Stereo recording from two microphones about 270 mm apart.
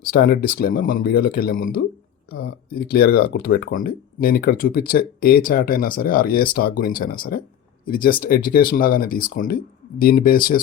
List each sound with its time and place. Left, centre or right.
0.1 s speech: left